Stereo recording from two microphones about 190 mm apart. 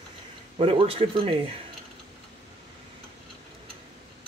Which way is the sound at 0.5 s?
30° right (ahead or behind).